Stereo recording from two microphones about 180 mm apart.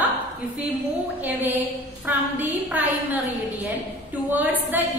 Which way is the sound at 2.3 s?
10° right (ahead or behind).